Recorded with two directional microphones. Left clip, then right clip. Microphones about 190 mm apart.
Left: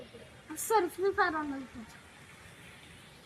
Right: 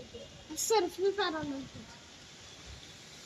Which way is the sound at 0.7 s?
20° left (ahead or behind).